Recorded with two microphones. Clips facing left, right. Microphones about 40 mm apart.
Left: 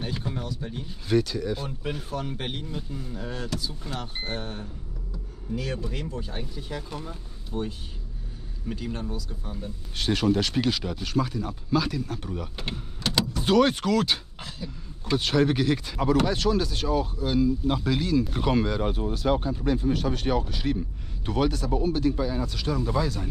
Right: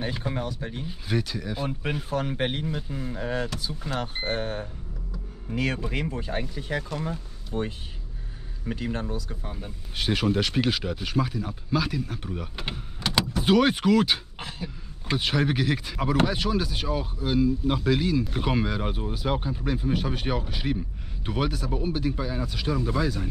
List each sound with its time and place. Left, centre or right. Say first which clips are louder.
0.3 s speech: right 2 dB; right
0.8 s speech: left 6 dB; centre
2.1 s speech: right 5 dB; right
9.5 s speech: left 1 dB; centre
14.4 s a sound: right 2 dB; right
15.1 s speech: left 3 dB; centre